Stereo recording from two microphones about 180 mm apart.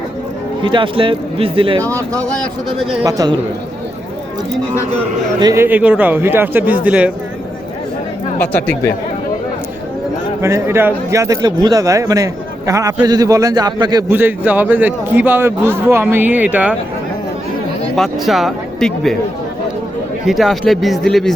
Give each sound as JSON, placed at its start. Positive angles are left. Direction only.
{"t": 0.6, "sound": "speech", "side_deg": -25}
{"t": 3.0, "sound": "speech", "side_deg": -20}
{"t": 5.4, "sound": "speech", "side_deg": -20}
{"t": 5.6, "sound": "a man's voice", "side_deg": -10}
{"t": 8.4, "sound": "speech", "side_deg": 10}
{"t": 10.4, "sound": "speech", "side_deg": -15}
{"t": 14.1, "sound": "a man's voice", "side_deg": -10}
{"t": 17.9, "sound": "speech", "side_deg": 0}
{"t": 20.2, "sound": "speech", "side_deg": 0}